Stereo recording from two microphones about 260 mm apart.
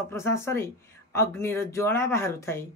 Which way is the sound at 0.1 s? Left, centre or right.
Centre.